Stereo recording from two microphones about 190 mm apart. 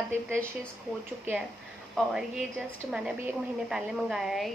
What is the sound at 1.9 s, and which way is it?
A woman's voice, centre (ahead or behind).